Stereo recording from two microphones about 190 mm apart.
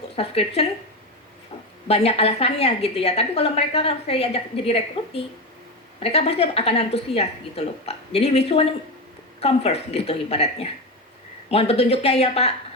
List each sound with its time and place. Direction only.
0.2 s a woman's voice: 30° left (ahead or behind)
1.9 s a woman's voice: 30° left (ahead or behind)